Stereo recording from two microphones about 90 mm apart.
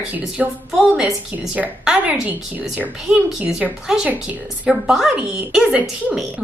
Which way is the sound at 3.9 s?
5° right (ahead or behind).